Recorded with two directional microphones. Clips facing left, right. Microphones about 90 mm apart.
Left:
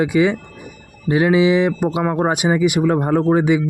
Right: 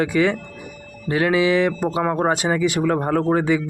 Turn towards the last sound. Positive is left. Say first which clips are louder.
# left 3 dB
turn(degrees=15)  # may be behind; listen again after turning